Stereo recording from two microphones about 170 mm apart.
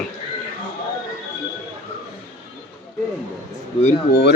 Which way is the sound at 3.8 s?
40° left (ahead or behind).